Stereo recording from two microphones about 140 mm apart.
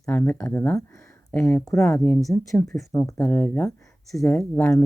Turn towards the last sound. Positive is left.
turn(degrees=20)  # may be behind; listen again after turning